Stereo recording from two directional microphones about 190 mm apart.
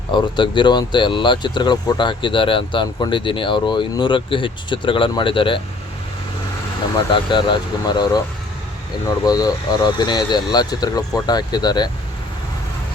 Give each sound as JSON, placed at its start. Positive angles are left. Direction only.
{"t": 0.1, "sound": "speech", "side_deg": 25}
{"t": 7.1, "sound": "speech", "side_deg": 25}